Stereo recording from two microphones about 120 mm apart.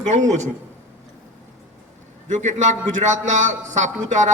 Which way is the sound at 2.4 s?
85° right.